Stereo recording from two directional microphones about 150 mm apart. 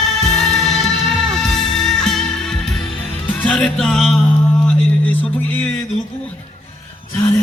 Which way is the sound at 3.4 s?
5° left (ahead or behind).